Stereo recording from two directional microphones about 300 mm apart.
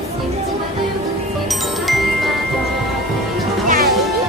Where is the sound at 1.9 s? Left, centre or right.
Centre.